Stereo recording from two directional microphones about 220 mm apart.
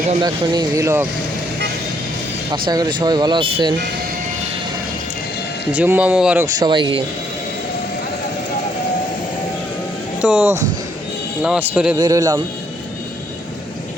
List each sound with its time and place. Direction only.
0.1 s speech: 20° right (ahead or behind)
2.5 s speech: 20° right (ahead or behind)
5.7 s speech: 5° right (ahead or behind)
6.6 s speech: 20° right (ahead or behind)
10.2 s speech: 5° right (ahead or behind)